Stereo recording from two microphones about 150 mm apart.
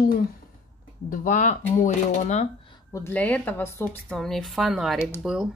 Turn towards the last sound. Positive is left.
turn(degrees=-5)  # may be behind; listen again after turning